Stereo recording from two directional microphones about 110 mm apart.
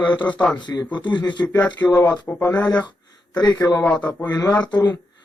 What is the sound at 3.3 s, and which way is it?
Speech, 35° left (ahead or behind).